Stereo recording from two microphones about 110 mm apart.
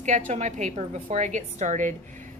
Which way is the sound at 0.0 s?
90° right.